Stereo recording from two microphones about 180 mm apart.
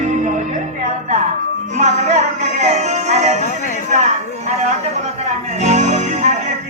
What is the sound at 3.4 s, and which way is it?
Speech, 45° left (ahead or behind).